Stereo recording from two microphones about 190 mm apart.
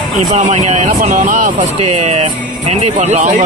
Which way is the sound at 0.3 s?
35° right (ahead or behind).